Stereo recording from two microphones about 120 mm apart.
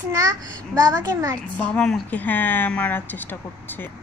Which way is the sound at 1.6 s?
10° left (ahead or behind).